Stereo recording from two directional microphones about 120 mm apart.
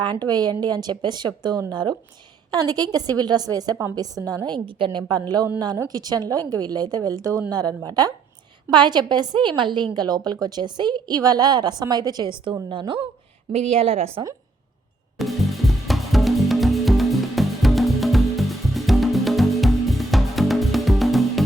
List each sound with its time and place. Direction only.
0.0 s a woman's voice: 35° right (ahead or behind)
13.7 s a woman's voice: 55° right (ahead or behind)
15.2 s music: centre (ahead or behind)